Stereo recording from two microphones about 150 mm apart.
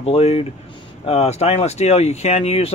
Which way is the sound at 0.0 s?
40° left (ahead or behind).